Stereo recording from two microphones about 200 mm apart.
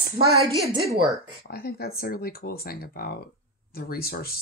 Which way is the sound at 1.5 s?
50° left (ahead or behind).